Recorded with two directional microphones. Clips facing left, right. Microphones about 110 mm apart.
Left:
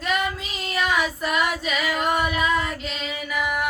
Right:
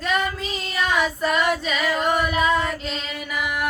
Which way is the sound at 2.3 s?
30° right (ahead or behind).